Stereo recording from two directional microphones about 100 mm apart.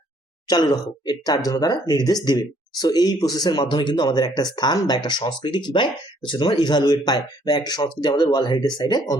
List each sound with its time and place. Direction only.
0.4 s speech: 45° left (ahead or behind)